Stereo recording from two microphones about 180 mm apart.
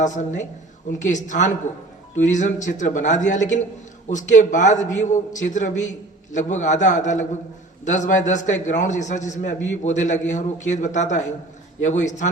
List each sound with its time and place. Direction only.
0.0 s a man's voice: 40° left (ahead or behind)